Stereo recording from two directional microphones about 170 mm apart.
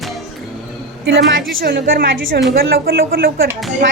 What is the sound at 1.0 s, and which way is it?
A woman's voice, 70° right (ahead or behind).